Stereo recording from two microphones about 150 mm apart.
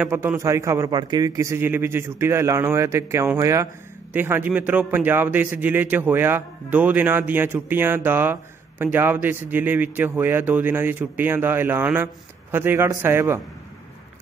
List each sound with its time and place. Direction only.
0.0 s a man's voice: 10° right (ahead or behind)